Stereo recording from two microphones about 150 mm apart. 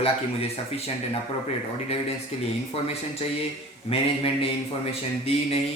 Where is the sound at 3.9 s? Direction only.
40° left (ahead or behind).